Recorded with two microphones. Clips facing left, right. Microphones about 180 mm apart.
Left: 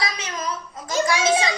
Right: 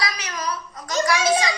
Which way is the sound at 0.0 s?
25° left (ahead or behind).